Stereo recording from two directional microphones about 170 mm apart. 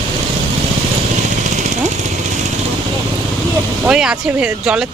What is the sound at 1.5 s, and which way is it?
Vehicle, 45° right (ahead or behind).